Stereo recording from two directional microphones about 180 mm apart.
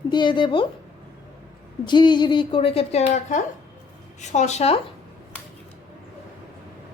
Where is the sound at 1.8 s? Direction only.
25° left (ahead or behind).